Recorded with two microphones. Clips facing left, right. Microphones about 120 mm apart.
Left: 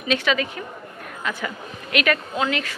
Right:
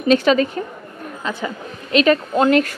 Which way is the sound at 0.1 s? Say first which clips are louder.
Right 8 dB; 40° right (ahead or behind).